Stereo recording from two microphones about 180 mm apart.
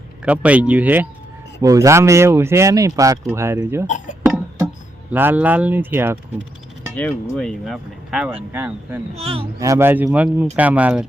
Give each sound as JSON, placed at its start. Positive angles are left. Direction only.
{"t": 0.3, "sound": "speech", "side_deg": -5}
{"t": 3.8, "sound": "speech", "side_deg": 45}
{"t": 5.1, "sound": "speech", "side_deg": -10}
{"t": 6.9, "sound": "speech", "side_deg": 5}
{"t": 9.1, "sound": "speech", "side_deg": -30}
{"t": 9.6, "sound": "speech", "side_deg": -15}